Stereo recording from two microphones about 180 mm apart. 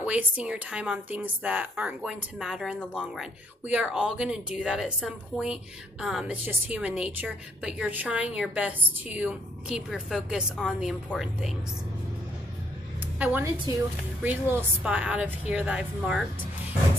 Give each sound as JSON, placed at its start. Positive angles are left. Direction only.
{"t": 0.0, "sound": "a woman's voice", "side_deg": -5}
{"t": 13.2, "sound": "a woman's voice", "side_deg": -10}